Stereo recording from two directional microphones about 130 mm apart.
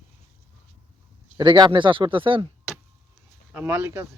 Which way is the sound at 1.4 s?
35° right (ahead or behind).